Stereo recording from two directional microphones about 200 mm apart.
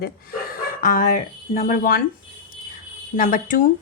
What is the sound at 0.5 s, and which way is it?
Speech, 40° left (ahead or behind).